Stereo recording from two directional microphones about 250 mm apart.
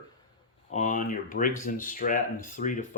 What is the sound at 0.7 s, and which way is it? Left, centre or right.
Speech, left.